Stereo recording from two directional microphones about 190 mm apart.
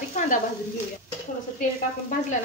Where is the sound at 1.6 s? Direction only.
45° left (ahead or behind).